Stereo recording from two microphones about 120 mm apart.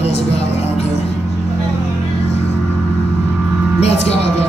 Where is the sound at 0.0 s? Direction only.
60° left (ahead or behind).